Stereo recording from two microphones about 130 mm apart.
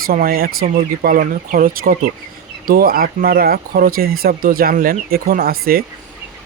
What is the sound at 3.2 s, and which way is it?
Speech, 90° right.